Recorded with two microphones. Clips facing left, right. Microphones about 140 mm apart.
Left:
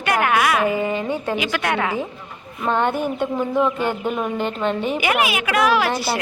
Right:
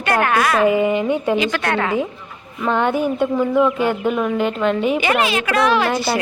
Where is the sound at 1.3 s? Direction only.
10° left (ahead or behind).